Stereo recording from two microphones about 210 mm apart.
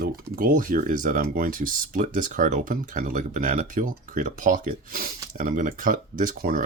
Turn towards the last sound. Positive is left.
turn(degrees=-40)  # may be behind; listen again after turning